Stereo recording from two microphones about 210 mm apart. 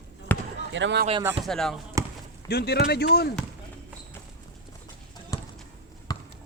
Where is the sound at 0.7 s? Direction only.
60° right (ahead or behind).